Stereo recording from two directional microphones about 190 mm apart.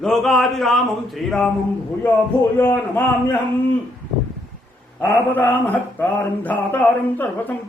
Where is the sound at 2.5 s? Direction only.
10° left (ahead or behind).